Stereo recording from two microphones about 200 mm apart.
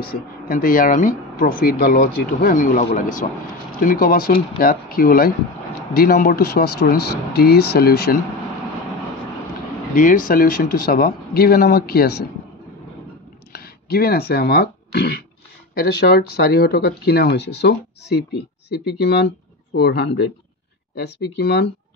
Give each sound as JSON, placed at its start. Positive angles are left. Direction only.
{"t": 0.0, "sound": "speech", "side_deg": 45}
{"t": 9.9, "sound": "speech", "side_deg": 45}
{"t": 13.5, "sound": "speech", "side_deg": 50}